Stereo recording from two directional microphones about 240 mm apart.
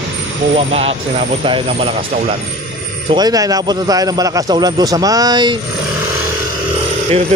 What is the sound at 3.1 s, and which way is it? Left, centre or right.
A man's voice, centre.